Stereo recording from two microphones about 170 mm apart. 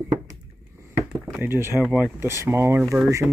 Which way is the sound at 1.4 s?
15° right (ahead or behind).